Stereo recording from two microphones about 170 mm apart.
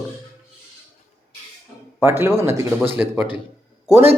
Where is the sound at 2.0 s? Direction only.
15° right (ahead or behind).